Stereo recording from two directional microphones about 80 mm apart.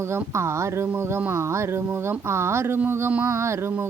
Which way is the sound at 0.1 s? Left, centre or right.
Right.